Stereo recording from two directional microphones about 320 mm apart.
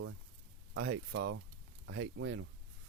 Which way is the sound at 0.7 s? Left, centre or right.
Right.